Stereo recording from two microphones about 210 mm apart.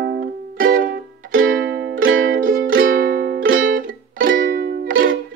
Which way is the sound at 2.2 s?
45° right (ahead or behind).